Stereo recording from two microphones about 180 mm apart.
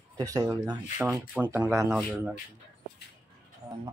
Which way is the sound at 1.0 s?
5° right (ahead or behind).